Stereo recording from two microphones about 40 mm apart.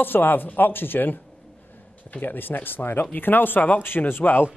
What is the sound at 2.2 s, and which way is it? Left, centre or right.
Speech, left.